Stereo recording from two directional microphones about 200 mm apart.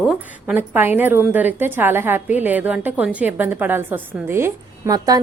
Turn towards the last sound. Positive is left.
turn(degrees=-20)  # may be behind; listen again after turning